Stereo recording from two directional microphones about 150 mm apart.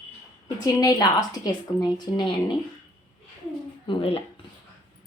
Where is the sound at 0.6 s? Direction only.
25° left (ahead or behind).